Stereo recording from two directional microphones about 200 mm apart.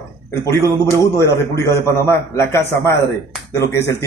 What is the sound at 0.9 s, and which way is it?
A man's voice, 15° left (ahead or behind).